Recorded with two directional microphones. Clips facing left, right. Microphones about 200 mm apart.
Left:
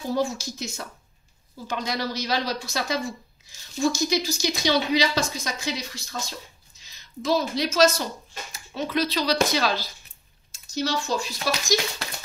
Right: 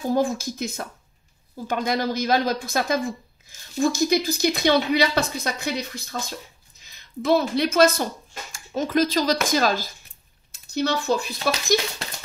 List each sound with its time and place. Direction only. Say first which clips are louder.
0.1 s a woman's voice: right 3 dB; 55° right (ahead or behind)
10.5 s speech: right 3 dB; 60° right (ahead or behind)